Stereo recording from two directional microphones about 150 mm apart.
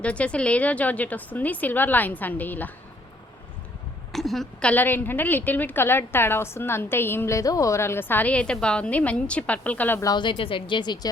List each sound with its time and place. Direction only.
0.0 s a woman's voice: 10° left (ahead or behind)
4.1 s a woman's voice: centre (ahead or behind)
10.1 s a woman's voice: 30° left (ahead or behind)